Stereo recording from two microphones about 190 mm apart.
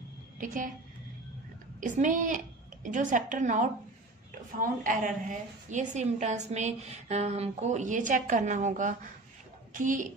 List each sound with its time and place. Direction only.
0.4 s a woman's voice: 45° right (ahead or behind)
1.8 s a woman's voice: 40° right (ahead or behind)